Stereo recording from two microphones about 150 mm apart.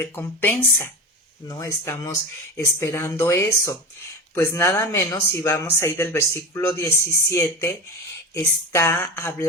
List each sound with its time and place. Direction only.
0.0 s speech: 15° left (ahead or behind)